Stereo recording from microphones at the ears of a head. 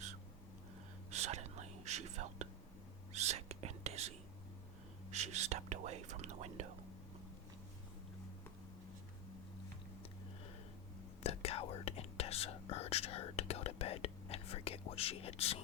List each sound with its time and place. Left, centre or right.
1.1 s whispering: right
5.1 s whispering: right
11.2 s whispering: left